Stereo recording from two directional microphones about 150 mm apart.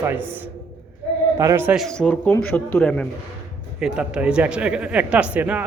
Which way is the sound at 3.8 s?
5° right (ahead or behind).